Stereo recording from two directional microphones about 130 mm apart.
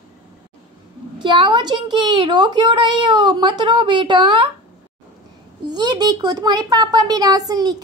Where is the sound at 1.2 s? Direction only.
35° right (ahead or behind).